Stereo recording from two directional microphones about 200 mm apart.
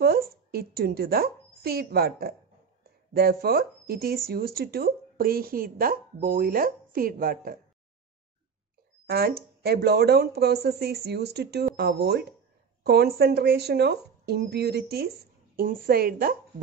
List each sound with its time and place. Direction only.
0.0 s a woman's voice: 50° right (ahead or behind)
9.1 s speech: 50° right (ahead or behind)